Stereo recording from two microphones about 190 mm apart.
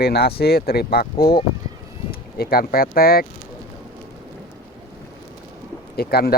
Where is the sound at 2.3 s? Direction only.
55° left (ahead or behind).